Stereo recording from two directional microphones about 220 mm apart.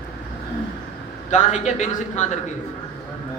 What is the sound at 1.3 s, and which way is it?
A man's voice, 30° left (ahead or behind).